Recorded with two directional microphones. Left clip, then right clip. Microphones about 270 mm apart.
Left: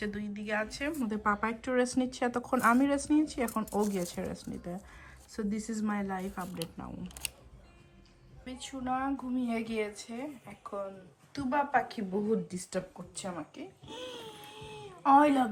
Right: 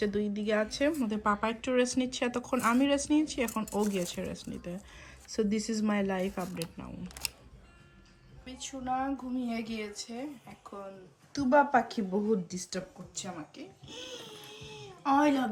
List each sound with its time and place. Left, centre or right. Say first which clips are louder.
0.0 s speech: right 7 dB; centre
0.9 s speech: right 1 dB; centre
8.4 s speech: right 1 dB; centre
11.3 s a woman's voice: right 5 dB; centre
12.5 s speech: left 2 dB; centre